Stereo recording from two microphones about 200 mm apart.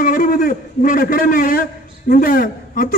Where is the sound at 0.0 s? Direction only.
45° left (ahead or behind).